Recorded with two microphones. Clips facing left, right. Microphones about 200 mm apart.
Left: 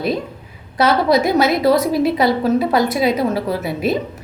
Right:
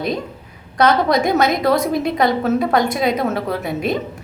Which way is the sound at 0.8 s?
5° left (ahead or behind).